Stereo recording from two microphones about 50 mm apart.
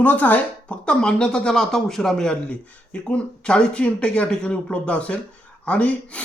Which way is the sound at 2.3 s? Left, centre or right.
Left.